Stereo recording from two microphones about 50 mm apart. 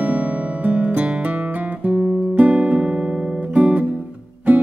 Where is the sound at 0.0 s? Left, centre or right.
Right.